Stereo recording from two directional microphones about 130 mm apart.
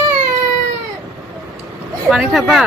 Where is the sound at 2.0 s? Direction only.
5° right (ahead or behind).